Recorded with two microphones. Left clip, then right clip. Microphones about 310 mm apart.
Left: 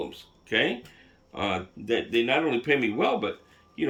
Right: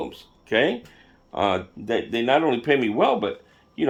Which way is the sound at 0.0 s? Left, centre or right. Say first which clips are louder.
Right 3 dB; centre.